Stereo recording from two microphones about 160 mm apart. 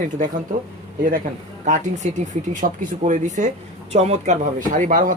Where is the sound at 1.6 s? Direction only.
50° right (ahead or behind).